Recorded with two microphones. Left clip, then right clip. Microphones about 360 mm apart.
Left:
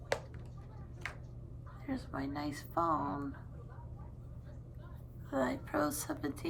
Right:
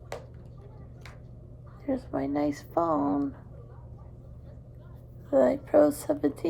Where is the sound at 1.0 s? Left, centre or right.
Centre.